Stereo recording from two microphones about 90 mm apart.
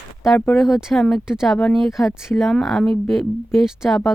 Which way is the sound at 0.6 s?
5° right (ahead or behind).